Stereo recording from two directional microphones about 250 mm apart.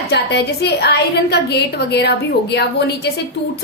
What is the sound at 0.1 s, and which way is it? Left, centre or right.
A woman's voice, left.